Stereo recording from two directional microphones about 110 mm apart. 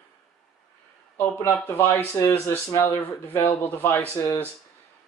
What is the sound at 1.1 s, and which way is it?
Speech, 25° left (ahead or behind).